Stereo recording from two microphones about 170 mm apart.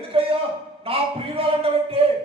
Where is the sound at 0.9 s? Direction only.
35° right (ahead or behind).